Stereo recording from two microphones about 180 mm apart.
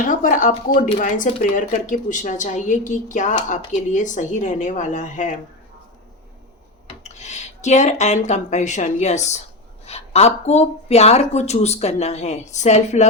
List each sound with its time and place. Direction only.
0.0 s speech: 45° left (ahead or behind)
7.0 s speech: 40° left (ahead or behind)